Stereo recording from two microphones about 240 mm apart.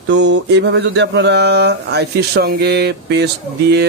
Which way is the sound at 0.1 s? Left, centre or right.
Right.